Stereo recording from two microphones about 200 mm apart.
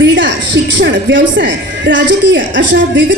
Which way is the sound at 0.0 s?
65° right (ahead or behind).